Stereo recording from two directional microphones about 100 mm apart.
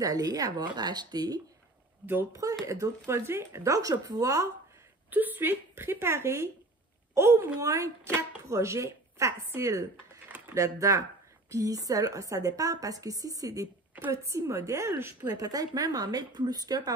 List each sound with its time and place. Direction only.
0.0 s a woman's voice: 40° right (ahead or behind)
2.6 s a woman's voice: 35° right (ahead or behind)
5.1 s a woman's voice: 20° right (ahead or behind)
15.3 s a woman's voice: 40° right (ahead or behind)